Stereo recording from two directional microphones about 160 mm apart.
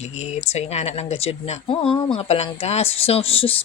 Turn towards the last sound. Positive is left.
turn(degrees=35)  # may be behind; listen again after turning